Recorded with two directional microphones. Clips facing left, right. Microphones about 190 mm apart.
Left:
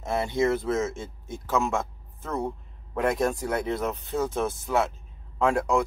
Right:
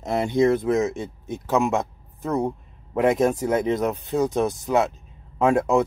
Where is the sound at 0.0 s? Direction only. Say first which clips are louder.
Right 5 dB; 20° right (ahead or behind).